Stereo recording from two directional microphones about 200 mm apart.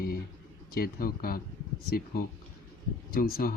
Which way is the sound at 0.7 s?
50° left (ahead or behind).